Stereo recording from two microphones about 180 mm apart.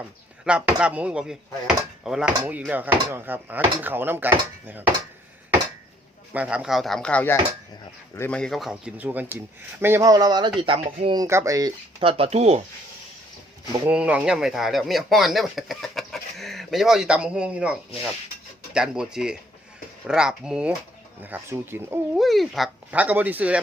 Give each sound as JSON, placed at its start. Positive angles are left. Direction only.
{"t": 0.4, "sound": "speech", "side_deg": -5}
{"t": 6.3, "sound": "speech", "side_deg": -5}
{"t": 11.9, "sound": "speech", "side_deg": -30}
{"t": 13.8, "sound": "speech", "side_deg": -5}
{"t": 22.2, "sound": "speech", "side_deg": 0}